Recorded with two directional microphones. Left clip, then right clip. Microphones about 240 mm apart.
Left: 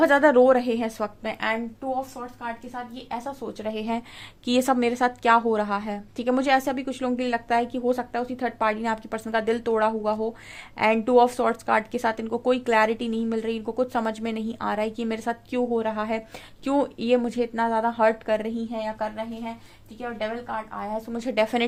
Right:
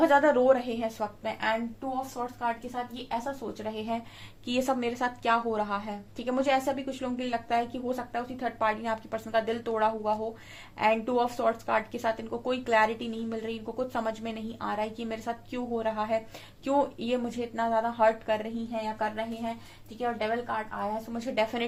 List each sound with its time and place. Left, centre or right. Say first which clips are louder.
0.0 s a woman's voice: left 5 dB; left
3.6 s a woman's voice: left 7 dB; left